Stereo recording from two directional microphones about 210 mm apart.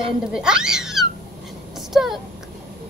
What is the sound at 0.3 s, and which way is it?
Speech, 5° right (ahead or behind).